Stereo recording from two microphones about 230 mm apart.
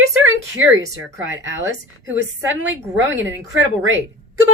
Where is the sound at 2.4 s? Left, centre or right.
Right.